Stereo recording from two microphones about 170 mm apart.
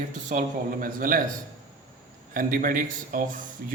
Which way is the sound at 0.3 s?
55° right (ahead or behind).